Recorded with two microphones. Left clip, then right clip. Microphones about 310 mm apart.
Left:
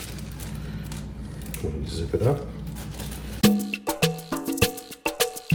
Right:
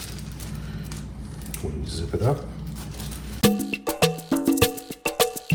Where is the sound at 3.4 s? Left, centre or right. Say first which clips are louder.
Right 1 dB; right.